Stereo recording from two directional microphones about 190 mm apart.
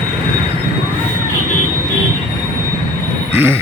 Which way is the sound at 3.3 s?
10° right (ahead or behind).